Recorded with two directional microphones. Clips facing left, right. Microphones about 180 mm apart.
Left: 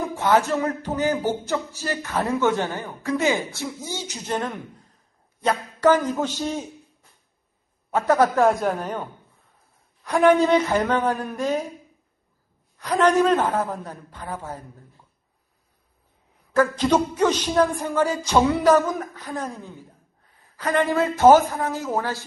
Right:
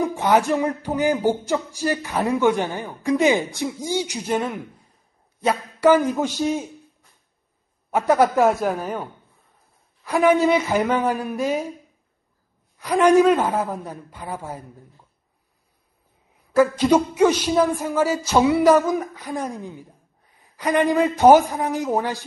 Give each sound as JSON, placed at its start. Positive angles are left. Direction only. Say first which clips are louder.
{"t": 0.0, "sound": "music", "louder": "right 2 dB", "side_deg": -15}
{"t": 7.9, "sound": "music", "louder": "right 1 dB", "side_deg": -10}
{"t": 10.0, "sound": "music", "louder": "even", "side_deg": -5}
{"t": 12.7, "sound": "music", "louder": "right 4 dB", "side_deg": -10}
{"t": 16.5, "sound": "music", "louder": "right 3 dB", "side_deg": -10}